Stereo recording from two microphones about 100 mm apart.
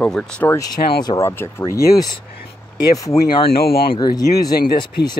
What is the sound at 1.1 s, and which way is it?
Speech, 25° left (ahead or behind).